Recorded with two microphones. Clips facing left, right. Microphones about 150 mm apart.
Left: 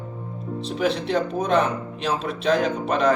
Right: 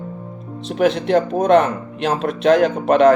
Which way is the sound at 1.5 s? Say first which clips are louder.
Right 7 dB; 80° right.